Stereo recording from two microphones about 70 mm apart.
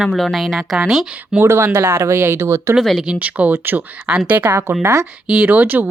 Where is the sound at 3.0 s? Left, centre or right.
Centre.